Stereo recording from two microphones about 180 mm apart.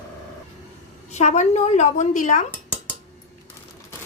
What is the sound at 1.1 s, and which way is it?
Speech, 40° left (ahead or behind).